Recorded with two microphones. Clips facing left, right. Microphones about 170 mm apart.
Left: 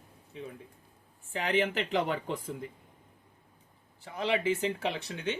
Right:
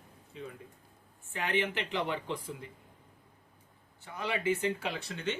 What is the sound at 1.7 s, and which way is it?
Speech, 45° left (ahead or behind).